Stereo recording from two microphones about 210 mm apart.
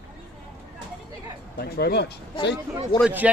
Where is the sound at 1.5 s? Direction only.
50° left (ahead or behind).